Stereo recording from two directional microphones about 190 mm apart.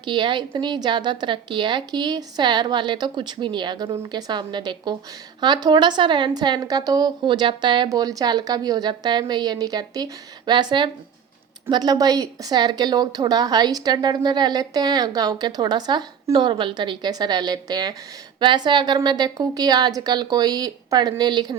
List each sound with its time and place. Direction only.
0.0 s a woman's voice: 25° right (ahead or behind)